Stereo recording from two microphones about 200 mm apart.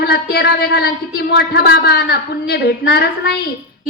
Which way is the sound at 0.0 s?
50° left (ahead or behind).